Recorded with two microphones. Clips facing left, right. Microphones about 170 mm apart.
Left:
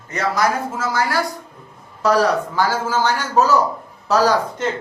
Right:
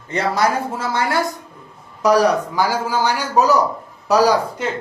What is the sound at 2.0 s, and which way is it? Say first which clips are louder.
A man's voice: right 2 dB; 15° right (ahead or behind).